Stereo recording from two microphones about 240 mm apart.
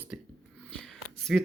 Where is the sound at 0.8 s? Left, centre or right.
Centre.